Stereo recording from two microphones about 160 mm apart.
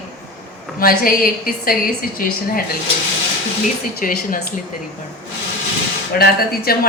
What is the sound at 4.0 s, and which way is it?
Speech, 60° left (ahead or behind).